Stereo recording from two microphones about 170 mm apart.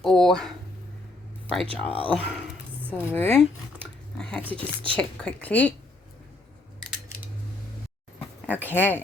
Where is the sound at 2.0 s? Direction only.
10° left (ahead or behind).